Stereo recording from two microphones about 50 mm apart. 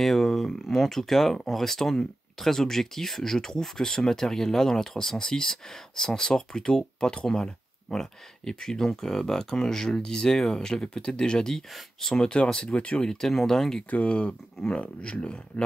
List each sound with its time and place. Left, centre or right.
0.0 s speech: centre; by 13.1 s left
13.1 s speech: centre
13.8 s speech: left